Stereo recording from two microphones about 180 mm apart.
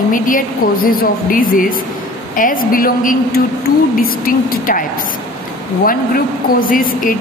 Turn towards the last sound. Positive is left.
turn(degrees=50)  # may be behind; listen again after turning